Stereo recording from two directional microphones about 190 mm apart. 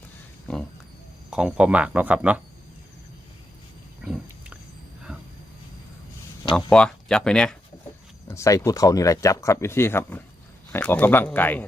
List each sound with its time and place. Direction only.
1.3 s speech: 5° right (ahead or behind)
4.0 s wild animals: 5° right (ahead or behind)
6.4 s a sound: 25° left (ahead or behind)
6.7 s speech: 5° left (ahead or behind)
8.3 s speech: 15° left (ahead or behind)